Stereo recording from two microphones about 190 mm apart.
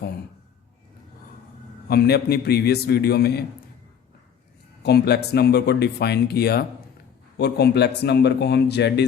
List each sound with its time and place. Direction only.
1.9 s speech: 55° left (ahead or behind)
4.8 s speech: 60° left (ahead or behind)